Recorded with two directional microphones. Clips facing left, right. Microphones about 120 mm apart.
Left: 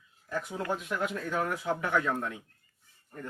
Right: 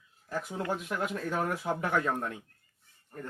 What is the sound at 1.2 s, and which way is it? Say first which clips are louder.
Speech: even; 40° right (ahead or behind).